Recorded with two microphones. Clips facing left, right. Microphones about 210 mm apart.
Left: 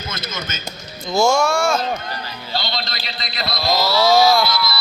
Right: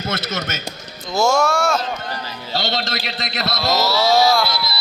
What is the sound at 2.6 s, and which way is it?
Speech, 80° right.